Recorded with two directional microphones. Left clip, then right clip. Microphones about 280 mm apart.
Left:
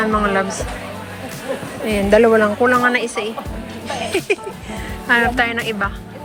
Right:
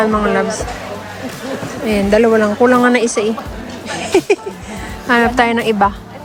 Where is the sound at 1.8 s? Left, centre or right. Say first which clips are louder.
Right 1 dB; centre.